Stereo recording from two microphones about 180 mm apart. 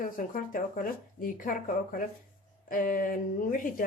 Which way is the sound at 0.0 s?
50° left (ahead or behind).